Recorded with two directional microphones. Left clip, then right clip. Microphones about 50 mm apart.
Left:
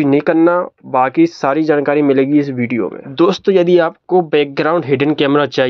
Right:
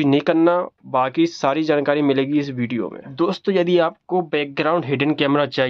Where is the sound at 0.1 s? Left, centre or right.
Left.